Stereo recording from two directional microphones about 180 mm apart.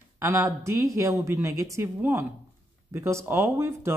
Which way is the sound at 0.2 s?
15° right (ahead or behind).